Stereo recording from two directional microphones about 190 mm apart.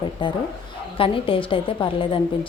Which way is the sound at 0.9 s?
30° left (ahead or behind).